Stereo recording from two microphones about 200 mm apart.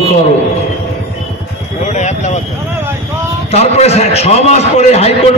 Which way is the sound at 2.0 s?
35° left (ahead or behind).